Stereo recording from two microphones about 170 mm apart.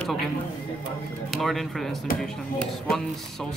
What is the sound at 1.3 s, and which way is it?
Speech, centre (ahead or behind).